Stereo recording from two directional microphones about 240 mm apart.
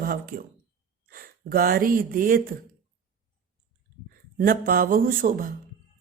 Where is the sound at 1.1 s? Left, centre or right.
Right.